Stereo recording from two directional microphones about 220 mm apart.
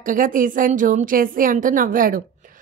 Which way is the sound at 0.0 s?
40° right (ahead or behind).